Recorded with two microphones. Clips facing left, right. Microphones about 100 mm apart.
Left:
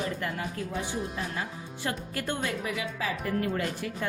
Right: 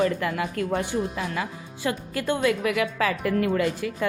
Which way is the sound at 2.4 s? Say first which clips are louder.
Right 9 dB; 75° right (ahead or behind).